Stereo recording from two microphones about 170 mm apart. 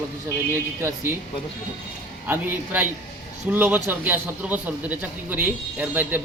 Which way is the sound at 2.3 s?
10° right (ahead or behind).